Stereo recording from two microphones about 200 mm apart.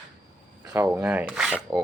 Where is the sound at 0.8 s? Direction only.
5° right (ahead or behind).